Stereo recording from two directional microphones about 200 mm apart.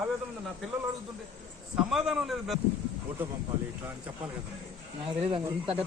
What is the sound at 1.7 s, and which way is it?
Speech, centre (ahead or behind).